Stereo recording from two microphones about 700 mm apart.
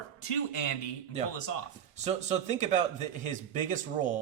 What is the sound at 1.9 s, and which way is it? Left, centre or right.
A man's voice, centre.